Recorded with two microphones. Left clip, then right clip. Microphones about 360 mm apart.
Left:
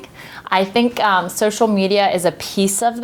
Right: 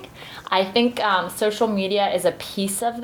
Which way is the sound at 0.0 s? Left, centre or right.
Left.